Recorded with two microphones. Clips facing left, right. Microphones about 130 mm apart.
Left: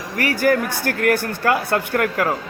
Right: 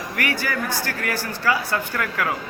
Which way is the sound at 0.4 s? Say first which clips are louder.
Left 8 dB; 55° left (ahead or behind).